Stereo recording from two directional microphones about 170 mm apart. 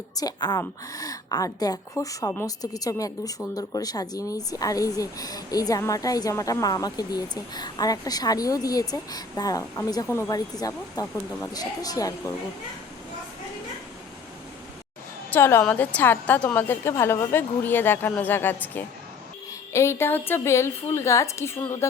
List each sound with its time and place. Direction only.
0.2 s speech: 25° left (ahead or behind)
15.3 s a woman's voice: 15° left (ahead or behind)